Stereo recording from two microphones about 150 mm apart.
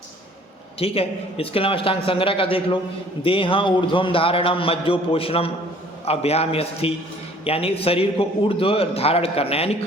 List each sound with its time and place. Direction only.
0.8 s a man's voice: 40° left (ahead or behind)